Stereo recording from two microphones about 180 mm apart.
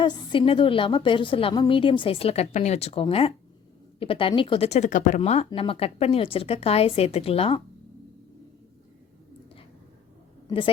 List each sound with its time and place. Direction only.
0.0 s a woman's voice: 25° left (ahead or behind)